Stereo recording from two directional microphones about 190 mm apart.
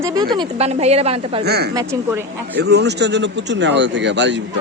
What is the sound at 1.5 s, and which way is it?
Speech, 60° right (ahead or behind).